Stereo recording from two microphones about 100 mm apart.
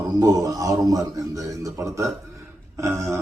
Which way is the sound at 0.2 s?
35° right (ahead or behind).